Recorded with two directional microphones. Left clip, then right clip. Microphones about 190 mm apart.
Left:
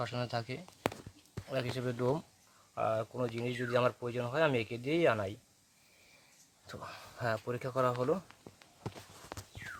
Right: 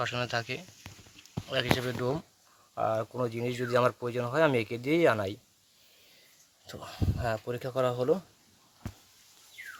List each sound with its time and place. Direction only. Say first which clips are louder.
0.0 s speech: right 6 dB; centre (ahead or behind)
2.7 s speech: right 4 dB; 15° right (ahead or behind)
6.7 s speech: right 6 dB; 5° right (ahead or behind)